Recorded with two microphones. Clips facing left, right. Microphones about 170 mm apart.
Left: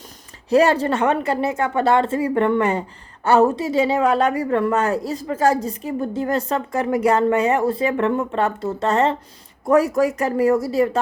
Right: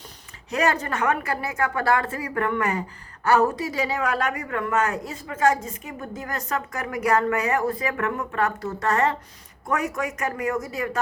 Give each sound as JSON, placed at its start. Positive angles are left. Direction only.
{"t": 0.5, "sound": "a woman's voice", "side_deg": 30}